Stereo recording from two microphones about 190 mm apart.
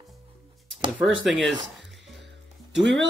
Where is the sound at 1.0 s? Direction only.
Centre (ahead or behind).